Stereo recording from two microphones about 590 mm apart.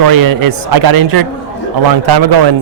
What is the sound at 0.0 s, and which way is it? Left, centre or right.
Speech, right.